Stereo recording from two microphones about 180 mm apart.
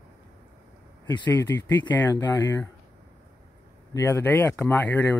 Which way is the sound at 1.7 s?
10° left (ahead or behind).